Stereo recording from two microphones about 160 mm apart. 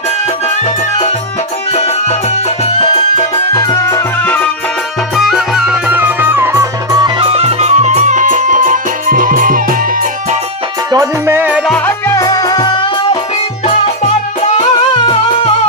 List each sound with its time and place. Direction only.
1.7 s music: 45° left (ahead or behind); by 4.4 s 10° left (ahead or behind)
5.1 s music: centre (ahead or behind); by 7.3 s 25° right (ahead or behind)
7.3 s music: 40° right (ahead or behind); by 10.1 s 60° right (ahead or behind)
10.9 s music: 20° right (ahead or behind)
11.9 s music: 15° left (ahead or behind)
13.7 s music: 45° left (ahead or behind)